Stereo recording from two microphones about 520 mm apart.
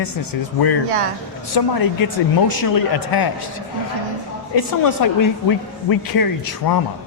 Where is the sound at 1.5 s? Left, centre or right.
Left.